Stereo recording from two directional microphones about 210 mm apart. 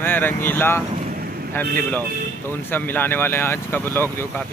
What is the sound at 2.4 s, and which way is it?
Speech, 10° left (ahead or behind).